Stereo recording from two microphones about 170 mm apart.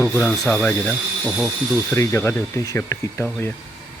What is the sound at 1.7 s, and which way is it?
Speech, 15° left (ahead or behind).